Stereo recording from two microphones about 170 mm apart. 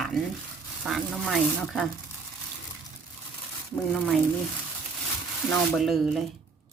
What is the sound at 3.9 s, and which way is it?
Speech, centre (ahead or behind).